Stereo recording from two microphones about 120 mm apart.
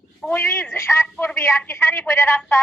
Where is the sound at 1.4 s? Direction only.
20° left (ahead or behind).